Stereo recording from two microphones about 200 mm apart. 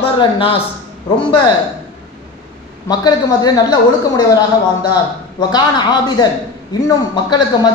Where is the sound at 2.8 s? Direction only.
20° left (ahead or behind).